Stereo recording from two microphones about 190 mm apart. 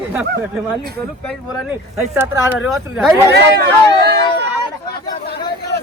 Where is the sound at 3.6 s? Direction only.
60° right (ahead or behind).